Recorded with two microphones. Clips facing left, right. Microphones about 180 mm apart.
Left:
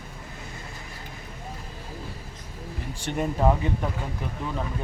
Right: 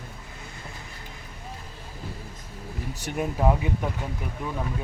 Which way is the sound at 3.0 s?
10° right (ahead or behind).